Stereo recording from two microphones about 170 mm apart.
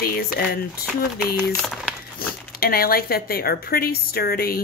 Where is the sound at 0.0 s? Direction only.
65° left (ahead or behind).